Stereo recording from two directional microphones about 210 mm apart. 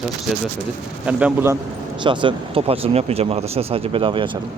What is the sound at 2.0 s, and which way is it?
Speech, 25° right (ahead or behind).